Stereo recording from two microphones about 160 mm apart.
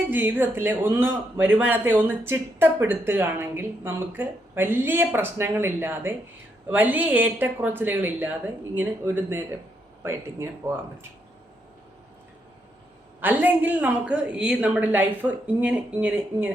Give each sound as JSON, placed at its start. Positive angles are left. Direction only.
{"t": 0.1, "sound": "a man's voice", "side_deg": -10}
{"t": 13.1, "sound": "a man's voice", "side_deg": -10}